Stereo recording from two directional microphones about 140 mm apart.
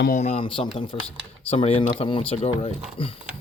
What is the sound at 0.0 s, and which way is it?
Speech, 75° left (ahead or behind).